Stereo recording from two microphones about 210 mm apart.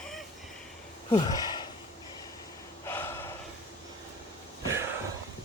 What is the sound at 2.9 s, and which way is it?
Gasp, 10° left (ahead or behind).